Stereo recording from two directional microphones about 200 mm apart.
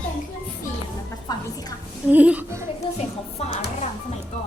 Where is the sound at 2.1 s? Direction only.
5° right (ahead or behind).